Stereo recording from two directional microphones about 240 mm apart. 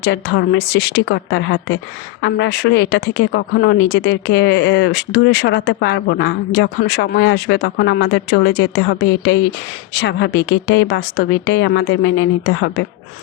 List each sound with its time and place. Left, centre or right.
0.0 s speech: left